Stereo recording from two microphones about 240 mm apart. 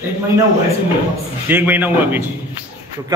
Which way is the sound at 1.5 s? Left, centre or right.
Centre.